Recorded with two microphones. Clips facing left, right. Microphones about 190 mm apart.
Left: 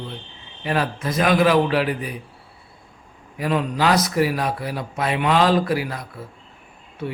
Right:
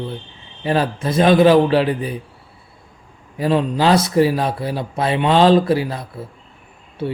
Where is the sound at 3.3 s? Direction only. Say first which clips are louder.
Right 4 dB; 30° right (ahead or behind).